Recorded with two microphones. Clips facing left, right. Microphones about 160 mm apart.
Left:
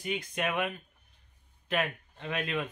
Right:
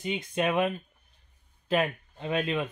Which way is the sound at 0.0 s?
25° right (ahead or behind).